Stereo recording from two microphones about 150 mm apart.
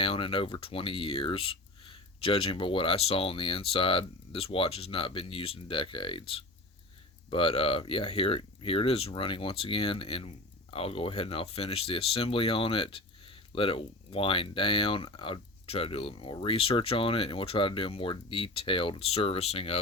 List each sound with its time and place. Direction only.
0.0 s speech: 35° left (ahead or behind)